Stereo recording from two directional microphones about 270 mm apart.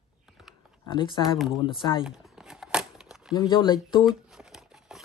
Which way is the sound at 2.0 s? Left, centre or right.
Centre.